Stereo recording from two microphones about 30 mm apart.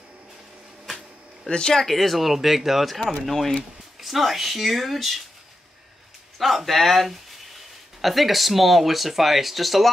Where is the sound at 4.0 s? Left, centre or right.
Centre.